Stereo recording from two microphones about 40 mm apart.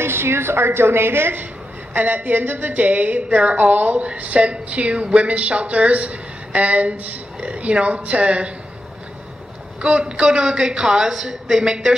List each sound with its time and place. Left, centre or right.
0.0 s a woman's voice: right
2.0 s a woman's voice: right
9.8 s a woman's voice: right